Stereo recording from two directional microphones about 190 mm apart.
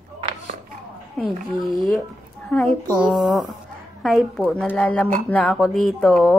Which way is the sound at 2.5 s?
Centre (ahead or behind).